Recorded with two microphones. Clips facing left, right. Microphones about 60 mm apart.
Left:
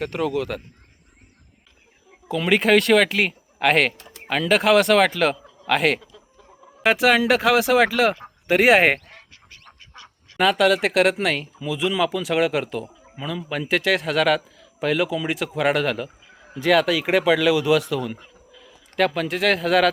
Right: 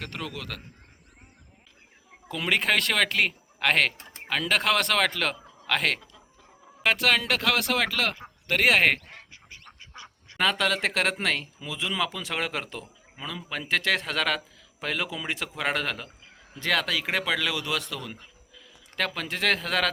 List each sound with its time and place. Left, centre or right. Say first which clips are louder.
0.0 s speech: left 12 dB; centre
2.2 s a man's voice: left 7 dB; centre
9.0 s goose: even; centre
9.9 s duck: even; centre
10.3 s speech: left 7 dB; centre